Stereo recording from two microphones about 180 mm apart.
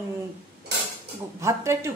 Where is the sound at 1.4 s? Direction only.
15° right (ahead or behind).